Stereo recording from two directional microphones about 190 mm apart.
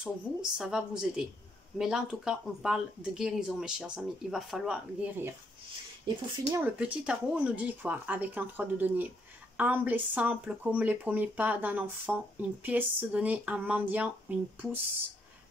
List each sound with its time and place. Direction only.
0.0 s speech: 5° right (ahead or behind)
6.0 s speech: 15° right (ahead or behind)
6.8 s speech: 5° right (ahead or behind)